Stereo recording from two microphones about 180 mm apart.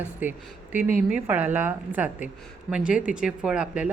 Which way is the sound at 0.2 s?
10° right (ahead or behind).